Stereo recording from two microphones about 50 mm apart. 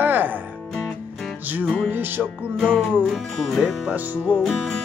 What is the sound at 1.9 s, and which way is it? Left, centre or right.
Music, right.